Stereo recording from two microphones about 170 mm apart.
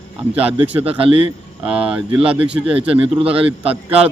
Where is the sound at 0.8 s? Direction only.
35° right (ahead or behind).